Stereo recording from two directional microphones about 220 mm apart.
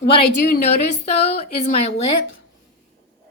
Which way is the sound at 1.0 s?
30° left (ahead or behind).